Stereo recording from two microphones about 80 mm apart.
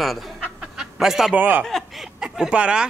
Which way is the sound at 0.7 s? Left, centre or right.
Centre.